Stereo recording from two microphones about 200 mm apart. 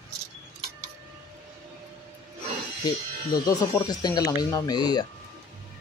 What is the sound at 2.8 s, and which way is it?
Speech, 20° left (ahead or behind).